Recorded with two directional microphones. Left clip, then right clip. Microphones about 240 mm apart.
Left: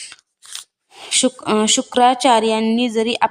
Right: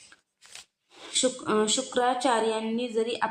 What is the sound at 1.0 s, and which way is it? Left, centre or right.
A woman's voice, left.